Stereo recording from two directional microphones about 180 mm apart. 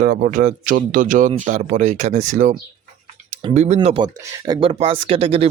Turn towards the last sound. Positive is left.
turn(degrees=-35)  # may be behind; listen again after turning